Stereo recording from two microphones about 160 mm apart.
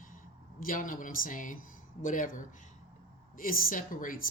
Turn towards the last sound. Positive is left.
turn(degrees=60)  # may be behind; listen again after turning